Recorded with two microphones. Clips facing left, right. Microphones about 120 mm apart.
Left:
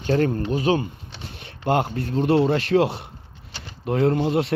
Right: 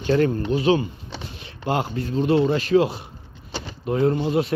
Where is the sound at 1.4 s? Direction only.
55° left (ahead or behind).